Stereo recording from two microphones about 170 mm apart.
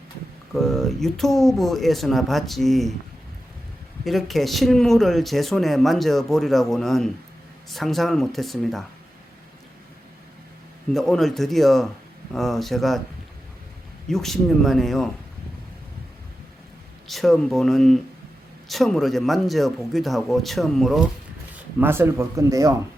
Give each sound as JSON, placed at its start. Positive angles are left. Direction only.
{"t": 0.5, "sound": "speech", "side_deg": 0}
{"t": 4.0, "sound": "speech", "side_deg": 0}
{"t": 10.9, "sound": "speech", "side_deg": 0}
{"t": 14.1, "sound": "speech", "side_deg": 0}
{"t": 17.1, "sound": "speech", "side_deg": 0}
{"t": 21.5, "sound": "speech", "side_deg": -15}